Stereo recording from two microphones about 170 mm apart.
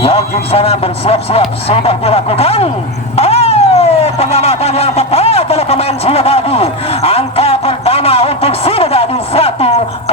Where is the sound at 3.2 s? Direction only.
35° left (ahead or behind).